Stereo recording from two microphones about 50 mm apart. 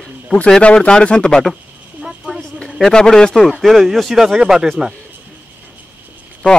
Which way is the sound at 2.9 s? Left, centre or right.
Centre.